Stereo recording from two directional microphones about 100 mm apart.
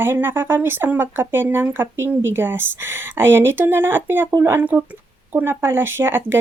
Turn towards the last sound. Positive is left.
turn(degrees=-20)  # may be behind; listen again after turning